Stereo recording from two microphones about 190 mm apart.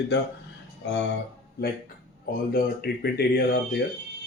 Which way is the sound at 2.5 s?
55° left (ahead or behind).